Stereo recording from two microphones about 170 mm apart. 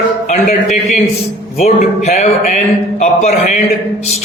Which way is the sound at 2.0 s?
40° left (ahead or behind).